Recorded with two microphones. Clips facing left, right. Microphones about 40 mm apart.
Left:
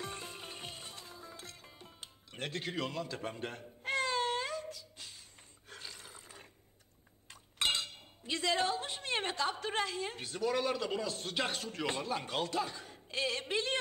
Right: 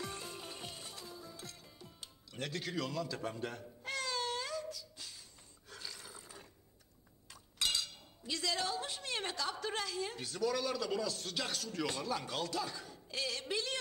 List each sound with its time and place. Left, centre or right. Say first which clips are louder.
0.0 s music: left 1 dB; left
3.8 s cat: left 6 dB; left
5.7 s a sound: even; left
7.2 s speech: left 4 dB; left